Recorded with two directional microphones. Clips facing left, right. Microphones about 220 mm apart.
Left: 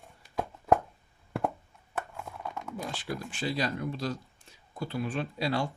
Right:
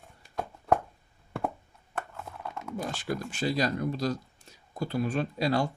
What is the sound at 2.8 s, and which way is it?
Speech, 45° right (ahead or behind).